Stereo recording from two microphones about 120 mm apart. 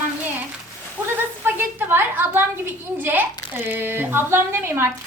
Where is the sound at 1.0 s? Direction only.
10° right (ahead or behind).